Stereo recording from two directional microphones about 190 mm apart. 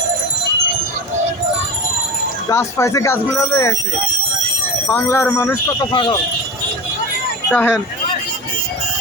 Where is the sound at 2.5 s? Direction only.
15° left (ahead or behind).